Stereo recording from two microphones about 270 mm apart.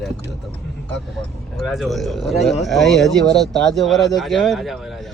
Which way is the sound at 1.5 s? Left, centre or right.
Centre.